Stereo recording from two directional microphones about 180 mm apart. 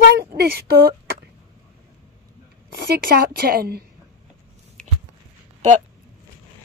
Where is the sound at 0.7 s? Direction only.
55° right (ahead or behind).